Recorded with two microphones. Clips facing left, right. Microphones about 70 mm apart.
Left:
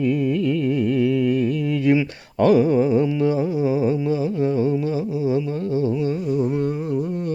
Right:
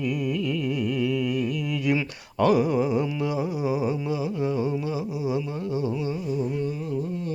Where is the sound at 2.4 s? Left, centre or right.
Left.